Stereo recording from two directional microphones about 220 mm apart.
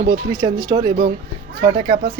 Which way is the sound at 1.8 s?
40° right (ahead or behind).